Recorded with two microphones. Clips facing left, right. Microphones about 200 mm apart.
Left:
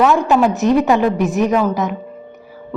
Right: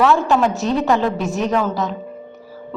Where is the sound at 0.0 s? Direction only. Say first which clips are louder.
Left 2 dB; 15° left (ahead or behind).